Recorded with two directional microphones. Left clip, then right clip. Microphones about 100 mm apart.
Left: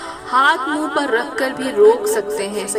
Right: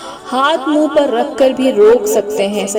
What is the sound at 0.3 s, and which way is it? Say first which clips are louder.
A woman's voice: right 1 dB; 30° right (ahead or behind).